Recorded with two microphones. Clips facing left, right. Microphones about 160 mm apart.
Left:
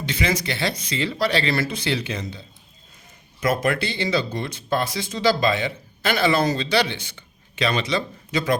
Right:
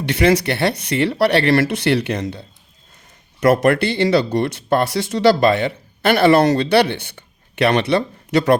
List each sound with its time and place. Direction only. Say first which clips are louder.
0.0 s speech: right 9 dB; 70° right (ahead or behind)
3.4 s speech: right 8 dB; 70° right (ahead or behind)